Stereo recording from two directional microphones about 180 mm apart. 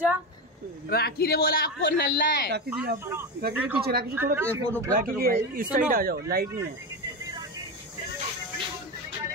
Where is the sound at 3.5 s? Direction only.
10° right (ahead or behind).